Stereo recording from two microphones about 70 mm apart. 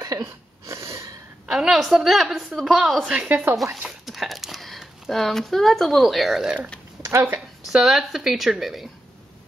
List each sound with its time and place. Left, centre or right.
0.0 s a sound: right
1.5 s a woman's voice: centre
3.3 s speech: right
4.0 s speech: centre
7.0 s speech: right
7.6 s a woman's voice: centre